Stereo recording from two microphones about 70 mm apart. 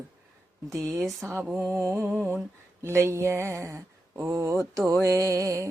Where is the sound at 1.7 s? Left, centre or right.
Right.